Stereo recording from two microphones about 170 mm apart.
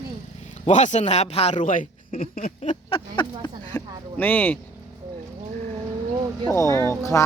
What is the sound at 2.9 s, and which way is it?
Speech, 25° left (ahead or behind).